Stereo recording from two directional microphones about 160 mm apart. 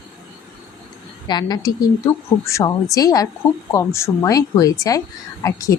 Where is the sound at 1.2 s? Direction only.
25° left (ahead or behind).